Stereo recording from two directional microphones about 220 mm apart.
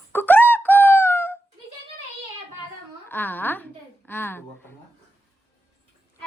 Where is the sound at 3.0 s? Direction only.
10° left (ahead or behind).